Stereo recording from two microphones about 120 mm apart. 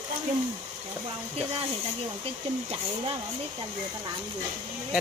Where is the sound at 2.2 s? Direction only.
55° right (ahead or behind).